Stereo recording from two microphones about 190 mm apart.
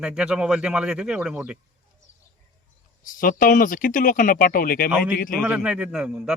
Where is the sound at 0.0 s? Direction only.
5° right (ahead or behind).